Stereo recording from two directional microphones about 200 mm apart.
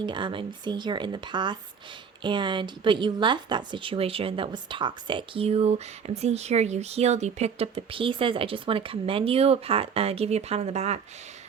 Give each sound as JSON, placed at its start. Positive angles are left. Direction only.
{"t": 0.0, "sound": "speech", "side_deg": -25}